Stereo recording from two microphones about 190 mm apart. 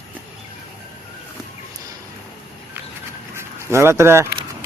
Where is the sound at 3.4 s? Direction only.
15° right (ahead or behind).